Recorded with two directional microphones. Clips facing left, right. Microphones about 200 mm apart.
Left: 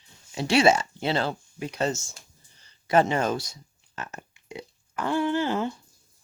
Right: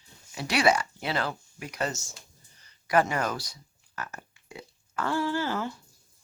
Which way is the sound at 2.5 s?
25° left (ahead or behind).